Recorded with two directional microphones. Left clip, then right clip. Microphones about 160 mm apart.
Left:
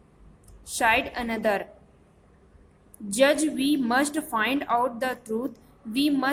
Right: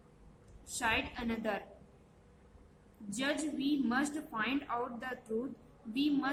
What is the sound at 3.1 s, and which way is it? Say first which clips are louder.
A woman's voice: left 15 dB; 45° left (ahead or behind).